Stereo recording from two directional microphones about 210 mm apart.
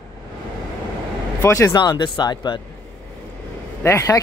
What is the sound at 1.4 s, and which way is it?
Speech, 15° left (ahead or behind).